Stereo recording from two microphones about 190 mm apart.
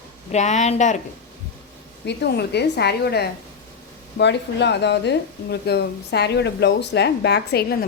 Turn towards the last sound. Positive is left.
turn(degrees=55)  # may be behind; listen again after turning